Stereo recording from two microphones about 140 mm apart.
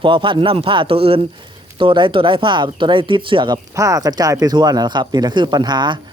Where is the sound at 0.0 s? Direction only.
35° right (ahead or behind).